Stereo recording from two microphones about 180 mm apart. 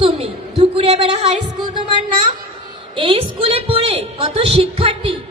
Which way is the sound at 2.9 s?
30° right (ahead or behind).